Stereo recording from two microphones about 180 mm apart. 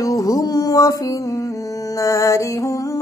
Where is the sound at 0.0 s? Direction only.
20° left (ahead or behind).